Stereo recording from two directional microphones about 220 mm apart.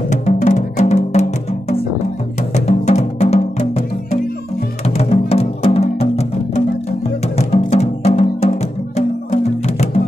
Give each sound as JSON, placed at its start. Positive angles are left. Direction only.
{"t": 0.1, "sound": "music", "side_deg": 30}
{"t": 2.5, "sound": "music", "side_deg": 30}